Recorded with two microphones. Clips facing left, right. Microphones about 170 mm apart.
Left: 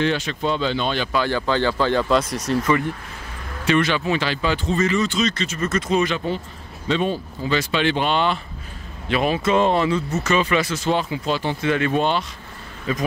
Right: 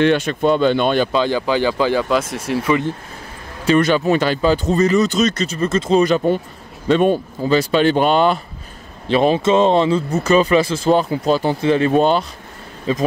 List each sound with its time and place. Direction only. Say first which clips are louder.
0.0 s speech: right 7 dB; 55° right (ahead or behind)
1.1 s speech: right 4 dB; 15° right (ahead or behind)
3.6 s speech: right 5 dB; 40° right (ahead or behind)
7.4 s speech: right 6 dB; 40° right (ahead or behind)
9.0 s speech: right 6 dB; 30° right (ahead or behind)
12.9 s speech: right 5 dB; 30° right (ahead or behind)